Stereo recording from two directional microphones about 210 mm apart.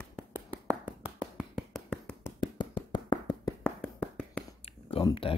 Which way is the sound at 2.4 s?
20° left (ahead or behind).